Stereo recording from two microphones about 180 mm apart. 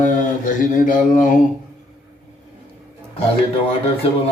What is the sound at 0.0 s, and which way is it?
Mantra, 45° left (ahead or behind).